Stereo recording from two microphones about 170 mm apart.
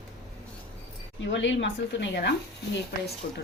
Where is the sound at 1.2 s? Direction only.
90° left.